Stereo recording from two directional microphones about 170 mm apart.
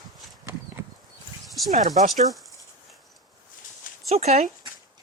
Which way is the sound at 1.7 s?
45° right (ahead or behind).